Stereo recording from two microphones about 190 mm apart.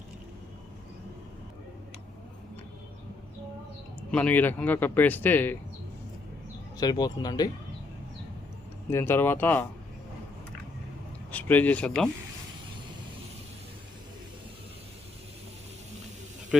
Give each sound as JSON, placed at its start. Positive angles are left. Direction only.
{"t": 4.1, "sound": "speech", "side_deg": 10}
{"t": 6.7, "sound": "speech", "side_deg": 20}
{"t": 8.9, "sound": "speech", "side_deg": 15}
{"t": 11.3, "sound": "speech", "side_deg": 10}